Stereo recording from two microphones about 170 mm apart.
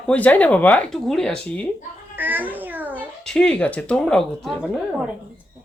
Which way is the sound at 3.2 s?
5° left (ahead or behind).